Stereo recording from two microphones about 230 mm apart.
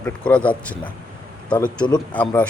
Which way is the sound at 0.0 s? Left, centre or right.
Centre.